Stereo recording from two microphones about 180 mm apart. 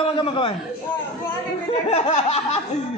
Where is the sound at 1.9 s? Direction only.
35° left (ahead or behind).